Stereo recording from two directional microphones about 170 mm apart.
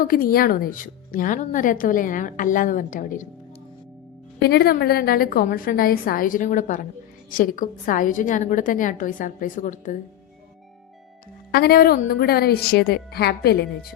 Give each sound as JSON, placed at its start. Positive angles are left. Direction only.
{"t": 0.0, "sound": "a woman's voice", "side_deg": 55}
{"t": 4.4, "sound": "a woman's voice", "side_deg": 65}
{"t": 11.5, "sound": "a woman's voice", "side_deg": 65}